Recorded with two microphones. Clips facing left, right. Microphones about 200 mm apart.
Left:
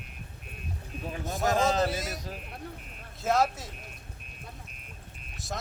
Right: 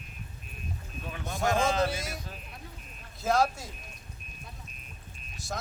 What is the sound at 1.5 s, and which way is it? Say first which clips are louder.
Speech: left 2 dB; 40° left (ahead or behind).